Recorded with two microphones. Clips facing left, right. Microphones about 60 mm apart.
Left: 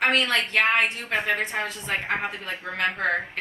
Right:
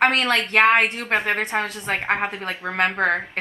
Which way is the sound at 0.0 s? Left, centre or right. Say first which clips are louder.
Right 3 dB; right.